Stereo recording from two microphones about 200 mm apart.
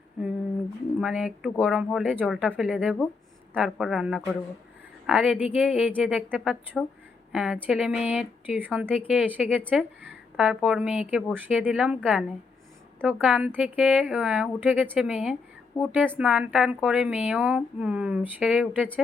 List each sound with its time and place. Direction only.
0.2 s a woman's voice: 5° right (ahead or behind)
15.7 s a woman's voice: 20° left (ahead or behind)
16.1 s speech: 5° right (ahead or behind)